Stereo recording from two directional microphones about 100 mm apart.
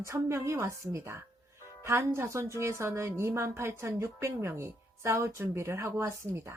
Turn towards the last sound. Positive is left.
turn(degrees=-30)  # may be behind; listen again after turning